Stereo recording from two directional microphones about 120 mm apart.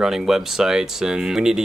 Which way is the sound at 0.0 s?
5° right (ahead or behind).